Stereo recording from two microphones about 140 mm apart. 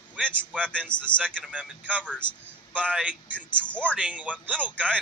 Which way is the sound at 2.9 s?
10° right (ahead or behind).